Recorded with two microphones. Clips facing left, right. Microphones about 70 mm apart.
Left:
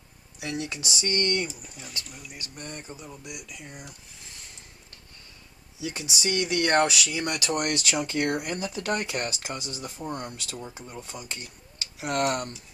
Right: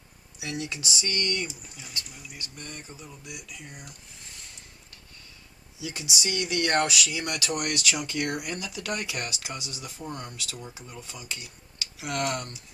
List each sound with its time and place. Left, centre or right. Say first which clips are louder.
0.3 s speech: left 1 dB; left
2.6 s speech: left 5 dB; left
3.7 s speech: left 2 dB; centre
5.8 s speech: left 2 dB; left
10.0 s speech: left 3 dB; left
10.3 s speech: left 2 dB; left